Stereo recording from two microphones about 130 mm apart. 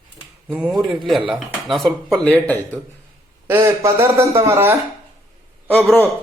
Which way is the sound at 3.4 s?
20° right (ahead or behind).